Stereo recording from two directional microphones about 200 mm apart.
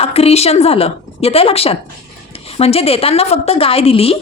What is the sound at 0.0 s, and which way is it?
A woman's voice, 30° left (ahead or behind).